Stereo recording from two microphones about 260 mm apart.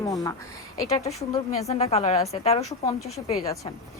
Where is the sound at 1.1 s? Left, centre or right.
Left.